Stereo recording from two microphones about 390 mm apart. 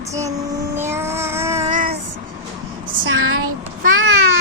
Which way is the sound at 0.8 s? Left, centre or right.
Centre.